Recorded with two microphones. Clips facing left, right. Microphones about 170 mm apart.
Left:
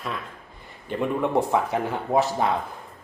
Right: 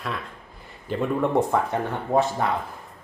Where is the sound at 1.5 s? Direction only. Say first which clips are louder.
Even; 5° left (ahead or behind).